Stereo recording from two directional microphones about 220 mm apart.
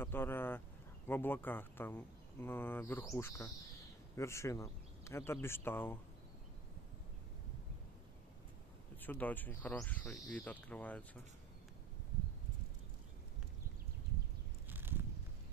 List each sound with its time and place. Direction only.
0.0 s speech: 10° left (ahead or behind)
9.0 s speech: 10° left (ahead or behind)
14.7 s a sound: 10° right (ahead or behind)